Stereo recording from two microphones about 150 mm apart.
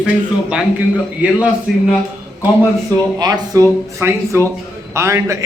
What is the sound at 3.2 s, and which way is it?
A man's voice, 25° right (ahead or behind).